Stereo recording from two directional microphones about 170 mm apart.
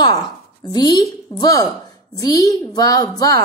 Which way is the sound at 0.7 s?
25° left (ahead or behind).